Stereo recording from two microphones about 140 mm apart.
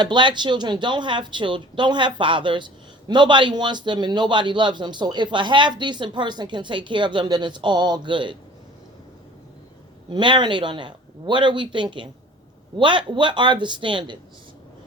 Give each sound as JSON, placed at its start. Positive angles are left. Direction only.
{"t": 0.0, "sound": "speech", "side_deg": -35}
{"t": 10.1, "sound": "speech", "side_deg": -35}